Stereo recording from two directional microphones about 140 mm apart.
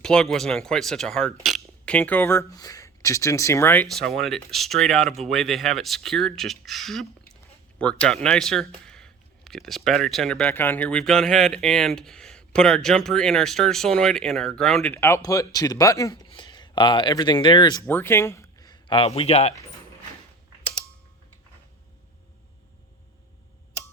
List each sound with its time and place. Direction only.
0.0 s speech: 5° left (ahead or behind)
3.8 s speech: centre (ahead or behind)
15.2 s speech: 25° left (ahead or behind)
17.8 s speech: 15° left (ahead or behind); by 19.5 s 45° left (ahead or behind)